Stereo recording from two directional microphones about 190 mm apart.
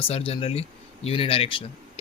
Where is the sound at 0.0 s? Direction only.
30° left (ahead or behind).